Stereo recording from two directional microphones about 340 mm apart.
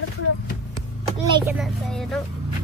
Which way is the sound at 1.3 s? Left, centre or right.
Centre.